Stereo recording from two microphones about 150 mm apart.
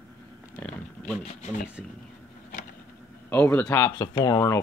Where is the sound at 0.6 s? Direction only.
5° left (ahead or behind).